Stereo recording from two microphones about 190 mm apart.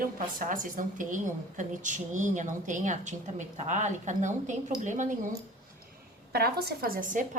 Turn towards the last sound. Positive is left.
turn(degrees=-45)  # may be behind; listen again after turning